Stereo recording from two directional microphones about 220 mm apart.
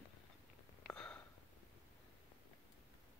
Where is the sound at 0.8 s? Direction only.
5° left (ahead or behind).